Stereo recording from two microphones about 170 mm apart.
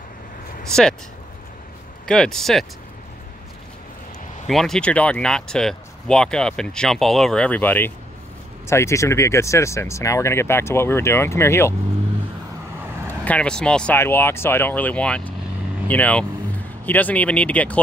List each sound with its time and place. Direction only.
2.0 s speech: 5° left (ahead or behind)
4.5 s speech: centre (ahead or behind)
13.2 s speech: 5° left (ahead or behind)